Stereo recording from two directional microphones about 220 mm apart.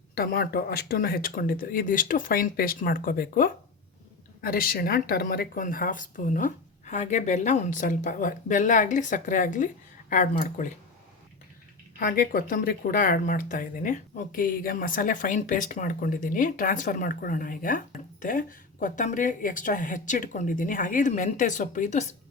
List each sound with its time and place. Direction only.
0.1 s speech: 45° left (ahead or behind)
11.9 s speech: 40° left (ahead or behind)